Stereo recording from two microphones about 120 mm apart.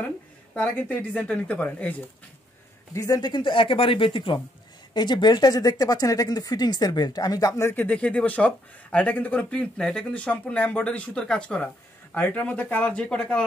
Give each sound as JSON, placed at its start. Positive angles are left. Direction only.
{"t": 0.6, "sound": "speech", "side_deg": 15}
{"t": 2.9, "sound": "speech", "side_deg": 30}